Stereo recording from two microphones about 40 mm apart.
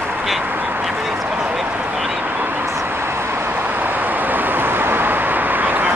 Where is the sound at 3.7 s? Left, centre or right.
Right.